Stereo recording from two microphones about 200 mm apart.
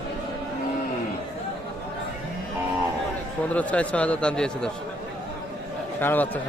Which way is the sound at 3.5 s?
5° left (ahead or behind).